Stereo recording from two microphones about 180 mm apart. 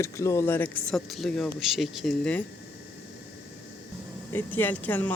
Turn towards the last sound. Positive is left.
turn(degrees=10)  # may be behind; listen again after turning